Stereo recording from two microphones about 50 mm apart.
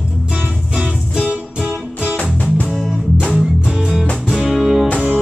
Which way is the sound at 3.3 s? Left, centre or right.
Centre.